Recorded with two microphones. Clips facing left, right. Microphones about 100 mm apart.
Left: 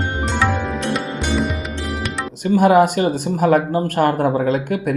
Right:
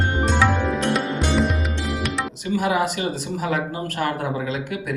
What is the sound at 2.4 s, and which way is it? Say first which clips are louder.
Speech: left 9 dB; 45° left (ahead or behind).